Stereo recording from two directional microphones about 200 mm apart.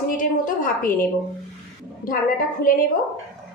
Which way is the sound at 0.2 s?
45° left (ahead or behind).